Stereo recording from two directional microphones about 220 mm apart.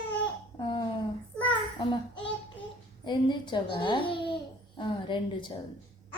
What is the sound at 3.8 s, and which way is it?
Babbling, 20° left (ahead or behind).